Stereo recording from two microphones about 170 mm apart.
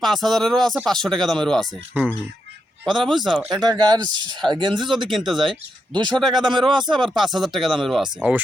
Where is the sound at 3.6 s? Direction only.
25° right (ahead or behind).